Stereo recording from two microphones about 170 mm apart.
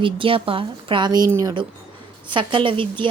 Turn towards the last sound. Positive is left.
turn(degrees=-30)  # may be behind; listen again after turning